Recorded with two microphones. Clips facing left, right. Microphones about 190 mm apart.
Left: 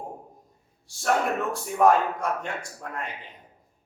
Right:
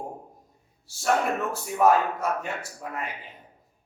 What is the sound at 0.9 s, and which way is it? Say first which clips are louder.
A man's voice: even; centre (ahead or behind).